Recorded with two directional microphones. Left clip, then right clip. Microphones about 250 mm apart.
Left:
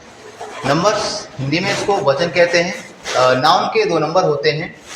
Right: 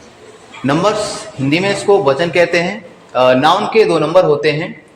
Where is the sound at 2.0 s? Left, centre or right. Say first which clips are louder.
Right 1 dB; right.